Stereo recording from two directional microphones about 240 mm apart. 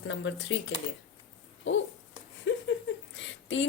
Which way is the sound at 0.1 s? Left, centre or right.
Left.